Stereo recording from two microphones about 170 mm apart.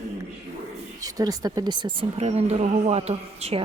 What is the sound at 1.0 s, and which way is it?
Speech, 20° right (ahead or behind).